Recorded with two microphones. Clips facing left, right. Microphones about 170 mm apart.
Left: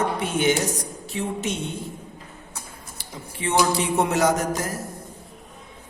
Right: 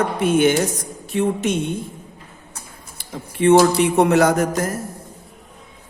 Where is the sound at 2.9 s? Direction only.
60° right (ahead or behind).